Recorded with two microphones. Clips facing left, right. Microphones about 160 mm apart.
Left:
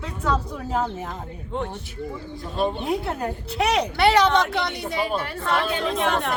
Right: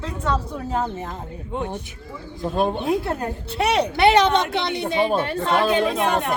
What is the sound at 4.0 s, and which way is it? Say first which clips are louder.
Speech: right 2 dB; 20° right (ahead or behind).